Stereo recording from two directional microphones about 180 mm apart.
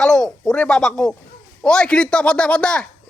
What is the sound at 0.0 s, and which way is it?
Speech, 5° left (ahead or behind).